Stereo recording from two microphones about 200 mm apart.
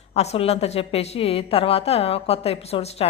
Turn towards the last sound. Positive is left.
turn(degrees=30)  # may be behind; listen again after turning